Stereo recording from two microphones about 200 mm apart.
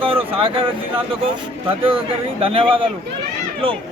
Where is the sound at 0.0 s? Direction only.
25° right (ahead or behind).